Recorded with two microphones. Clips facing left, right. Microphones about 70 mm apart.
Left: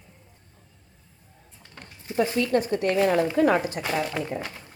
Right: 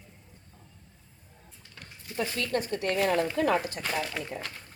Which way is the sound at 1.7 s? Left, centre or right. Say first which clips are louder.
Left 8 dB; left.